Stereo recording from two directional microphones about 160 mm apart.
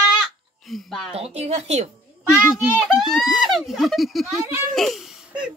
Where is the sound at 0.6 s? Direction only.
Centre (ahead or behind).